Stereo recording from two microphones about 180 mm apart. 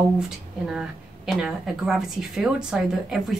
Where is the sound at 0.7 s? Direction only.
5° right (ahead or behind).